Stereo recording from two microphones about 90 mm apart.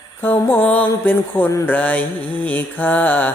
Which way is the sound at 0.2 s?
20° left (ahead or behind).